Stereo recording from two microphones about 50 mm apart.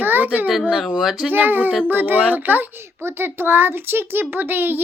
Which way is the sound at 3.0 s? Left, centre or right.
Right.